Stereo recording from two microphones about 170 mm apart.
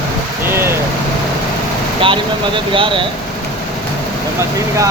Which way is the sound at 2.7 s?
30° right (ahead or behind).